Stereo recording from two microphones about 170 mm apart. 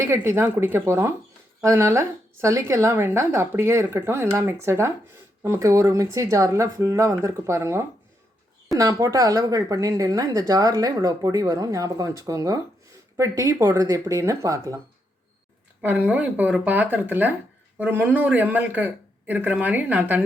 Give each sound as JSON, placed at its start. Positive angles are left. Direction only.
{"t": 0.0, "sound": "a woman's voice", "side_deg": -15}
{"t": 15.8, "sound": "a woman's voice", "side_deg": -10}